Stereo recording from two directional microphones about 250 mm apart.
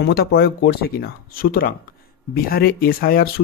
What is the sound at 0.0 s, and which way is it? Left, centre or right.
Speech, left.